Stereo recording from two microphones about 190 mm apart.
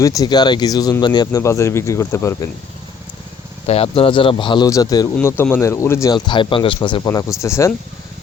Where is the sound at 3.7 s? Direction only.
30° left (ahead or behind).